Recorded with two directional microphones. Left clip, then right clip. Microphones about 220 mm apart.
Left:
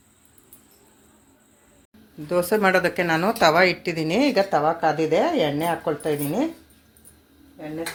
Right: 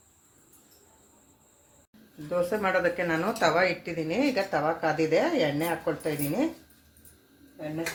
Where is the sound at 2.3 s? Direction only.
50° left (ahead or behind); by 6.4 s 35° left (ahead or behind).